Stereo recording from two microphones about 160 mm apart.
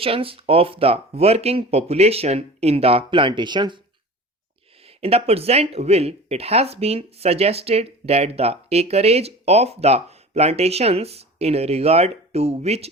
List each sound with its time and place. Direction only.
0.0 s speech: 35° right (ahead or behind)
4.9 s speech: 40° right (ahead or behind)